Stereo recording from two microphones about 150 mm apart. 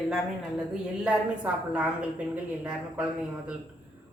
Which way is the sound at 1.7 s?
10° right (ahead or behind).